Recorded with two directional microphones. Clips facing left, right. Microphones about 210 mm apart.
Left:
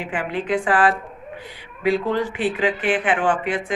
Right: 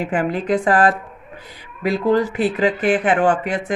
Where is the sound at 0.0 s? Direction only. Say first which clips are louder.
Right 5 dB; 40° right (ahead or behind).